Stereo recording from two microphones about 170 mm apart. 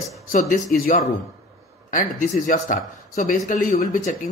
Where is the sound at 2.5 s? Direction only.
50° left (ahead or behind).